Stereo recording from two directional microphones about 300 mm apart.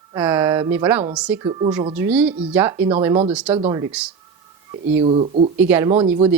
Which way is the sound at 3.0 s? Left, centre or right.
Centre.